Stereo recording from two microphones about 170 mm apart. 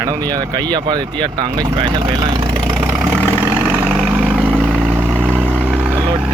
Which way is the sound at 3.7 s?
5° right (ahead or behind).